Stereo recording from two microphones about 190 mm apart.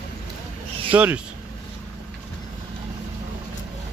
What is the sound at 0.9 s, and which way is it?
Speech, 5° right (ahead or behind).